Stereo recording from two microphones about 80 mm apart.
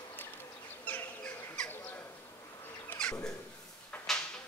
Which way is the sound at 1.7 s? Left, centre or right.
Left.